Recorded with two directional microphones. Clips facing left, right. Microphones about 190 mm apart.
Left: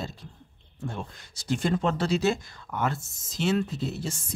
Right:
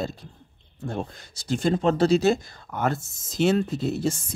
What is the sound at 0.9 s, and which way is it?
Speech, 35° right (ahead or behind).